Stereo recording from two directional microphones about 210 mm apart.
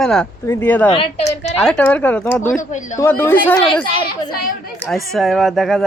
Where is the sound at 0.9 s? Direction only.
25° left (ahead or behind).